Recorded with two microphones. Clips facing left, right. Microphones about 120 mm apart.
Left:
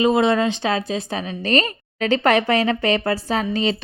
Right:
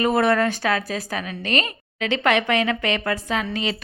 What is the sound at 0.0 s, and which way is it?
A woman's voice, 20° left (ahead or behind).